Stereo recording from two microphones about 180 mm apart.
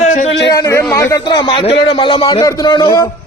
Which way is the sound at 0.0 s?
40° left (ahead or behind).